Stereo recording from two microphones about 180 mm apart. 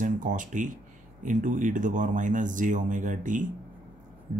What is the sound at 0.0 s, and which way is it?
Speech, 45° right (ahead or behind).